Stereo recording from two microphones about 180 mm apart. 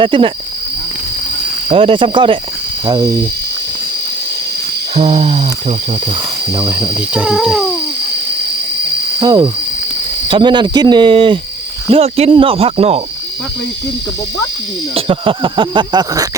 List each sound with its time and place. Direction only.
0.0 s speech: 30° right (ahead or behind)
1.7 s speech: 30° right (ahead or behind)
4.9 s speech: 35° right (ahead or behind)
6.6 s speech: 15° right (ahead or behind)
9.2 s speech: 20° right (ahead or behind)
14.9 s speech: 30° right (ahead or behind)